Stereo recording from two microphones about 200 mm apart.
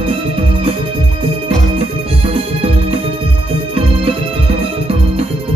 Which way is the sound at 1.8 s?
30° right (ahead or behind).